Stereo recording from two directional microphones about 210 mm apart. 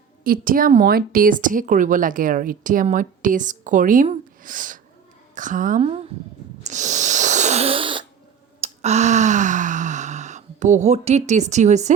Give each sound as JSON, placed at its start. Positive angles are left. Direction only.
{"t": 0.3, "sound": "speech", "side_deg": -40}
{"t": 6.7, "sound": "a sound", "side_deg": -35}
{"t": 8.6, "sound": "gasp", "side_deg": -30}